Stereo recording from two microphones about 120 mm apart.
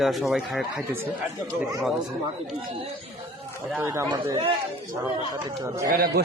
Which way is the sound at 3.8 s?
20° right (ahead or behind).